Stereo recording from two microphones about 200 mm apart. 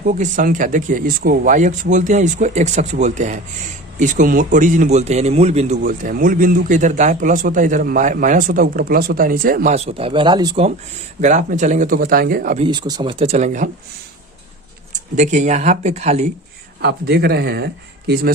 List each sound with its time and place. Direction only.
0.0 s a man's voice: 40° right (ahead or behind); by 10.7 s 20° right (ahead or behind)
11.2 s speech: 40° right (ahead or behind)
12.5 s speech: 25° right (ahead or behind)
14.9 s a man's voice: 35° right (ahead or behind)
16.8 s speech: 55° right (ahead or behind)